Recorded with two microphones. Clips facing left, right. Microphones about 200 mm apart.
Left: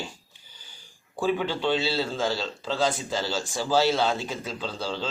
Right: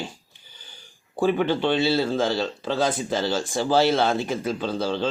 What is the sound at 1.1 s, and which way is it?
Speech, 55° right (ahead or behind).